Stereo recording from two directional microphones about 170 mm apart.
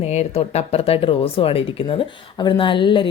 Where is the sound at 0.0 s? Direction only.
40° left (ahead or behind).